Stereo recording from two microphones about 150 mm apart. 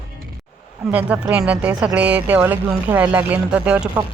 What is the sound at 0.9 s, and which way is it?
Speech, 10° right (ahead or behind).